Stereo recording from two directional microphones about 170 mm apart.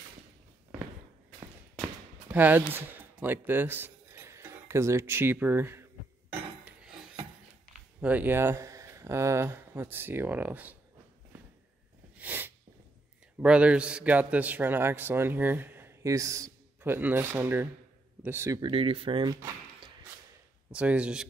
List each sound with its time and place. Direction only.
2.3 s speech: 10° right (ahead or behind)
6.3 s cutlery: 5° right (ahead or behind)
8.0 s speech: 10° right (ahead or behind)
12.2 s sneeze: 10° right (ahead or behind)
13.4 s a man's voice: 5° right (ahead or behind)
18.6 s speech: 30° right (ahead or behind)
20.7 s a man's voice: 5° right (ahead or behind)